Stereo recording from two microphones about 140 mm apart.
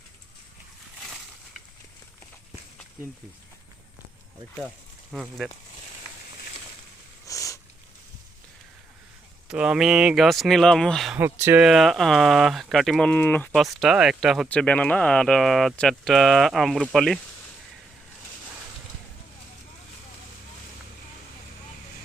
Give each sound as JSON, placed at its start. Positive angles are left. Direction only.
{"t": 5.1, "sound": "speech", "side_deg": 0}
{"t": 7.3, "sound": "sniff", "side_deg": 20}
{"t": 9.5, "sound": "speech", "side_deg": -5}
{"t": 11.2, "sound": "speech", "side_deg": -15}
{"t": 11.6, "sound": "speech", "side_deg": 0}
{"t": 13.7, "sound": "speech", "side_deg": 0}
{"t": 14.4, "sound": "speech", "side_deg": 10}